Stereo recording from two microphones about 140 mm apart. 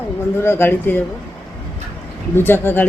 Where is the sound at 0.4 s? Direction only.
15° left (ahead or behind).